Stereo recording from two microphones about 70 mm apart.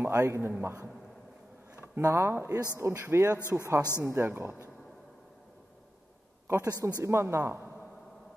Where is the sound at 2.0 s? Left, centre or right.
Right.